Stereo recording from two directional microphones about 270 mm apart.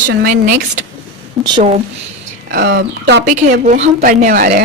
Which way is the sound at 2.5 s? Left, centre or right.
Right.